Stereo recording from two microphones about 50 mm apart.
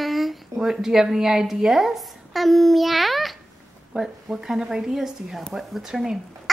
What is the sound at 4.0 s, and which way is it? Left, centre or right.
Speech, centre.